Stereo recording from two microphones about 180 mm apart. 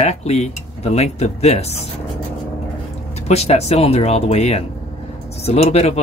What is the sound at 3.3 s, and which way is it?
Speech, 35° left (ahead or behind).